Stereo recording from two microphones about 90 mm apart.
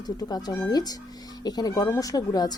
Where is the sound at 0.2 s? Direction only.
50° left (ahead or behind).